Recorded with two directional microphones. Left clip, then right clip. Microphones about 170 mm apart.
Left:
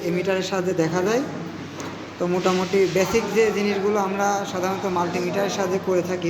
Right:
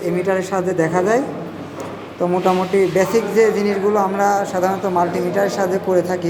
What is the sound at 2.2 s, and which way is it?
A woman's voice, 10° right (ahead or behind).